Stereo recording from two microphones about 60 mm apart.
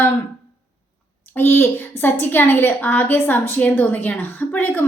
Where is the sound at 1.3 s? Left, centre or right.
Left.